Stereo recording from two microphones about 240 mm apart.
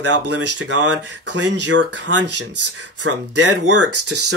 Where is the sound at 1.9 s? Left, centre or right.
Right.